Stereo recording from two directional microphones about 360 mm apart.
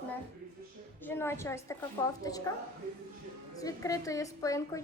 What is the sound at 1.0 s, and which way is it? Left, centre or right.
A woman's voice, centre.